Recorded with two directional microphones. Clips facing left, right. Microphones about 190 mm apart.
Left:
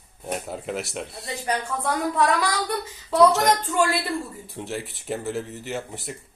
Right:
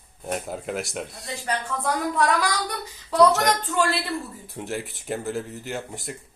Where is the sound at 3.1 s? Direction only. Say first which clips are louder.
Left 1 dB; centre (ahead or behind).